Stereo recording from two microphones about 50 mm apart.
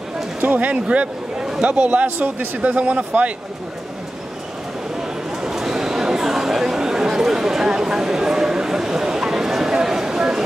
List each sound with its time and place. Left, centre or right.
0.4 s speech: right
1.4 s a man's voice: centre
1.7 s speech: right
5.4 s a sound: centre